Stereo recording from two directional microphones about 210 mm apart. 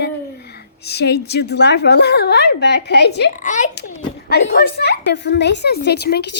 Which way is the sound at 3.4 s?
35° left (ahead or behind).